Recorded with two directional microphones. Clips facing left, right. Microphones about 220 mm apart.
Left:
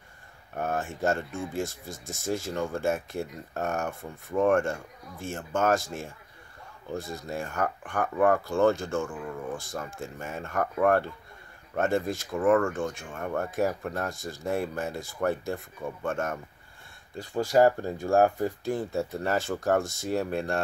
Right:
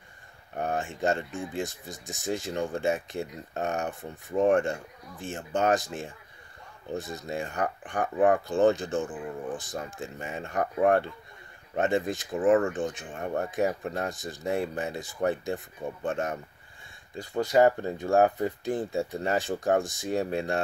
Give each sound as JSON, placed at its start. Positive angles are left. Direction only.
{"t": 0.6, "sound": "speech", "side_deg": -15}
{"t": 9.8, "sound": "speech", "side_deg": 0}
{"t": 10.1, "sound": "speech", "side_deg": -15}
{"t": 20.2, "sound": "speech", "side_deg": 0}